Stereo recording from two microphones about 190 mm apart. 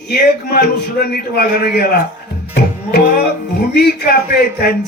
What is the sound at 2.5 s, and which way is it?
Tabla, 55° left (ahead or behind).